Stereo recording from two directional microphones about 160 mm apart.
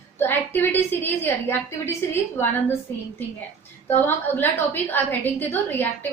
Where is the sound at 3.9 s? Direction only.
15° left (ahead or behind).